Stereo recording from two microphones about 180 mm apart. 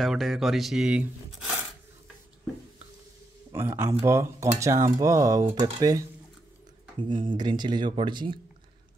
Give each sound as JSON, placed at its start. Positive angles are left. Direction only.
{"t": 0.0, "sound": "speech", "side_deg": 0}
{"t": 3.5, "sound": "speech", "side_deg": -15}